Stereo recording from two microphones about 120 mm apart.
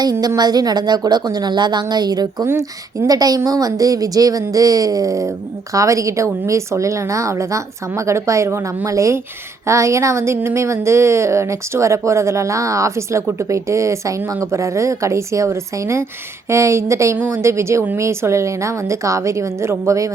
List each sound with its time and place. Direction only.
0.0 s a woman's voice: 30° right (ahead or behind)